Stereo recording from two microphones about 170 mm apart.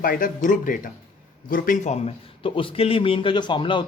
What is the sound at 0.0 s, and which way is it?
Speech, 55° left (ahead or behind).